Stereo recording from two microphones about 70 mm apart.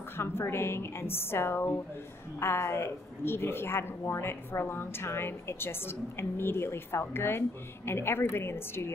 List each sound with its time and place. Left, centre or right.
0.2 s speech: left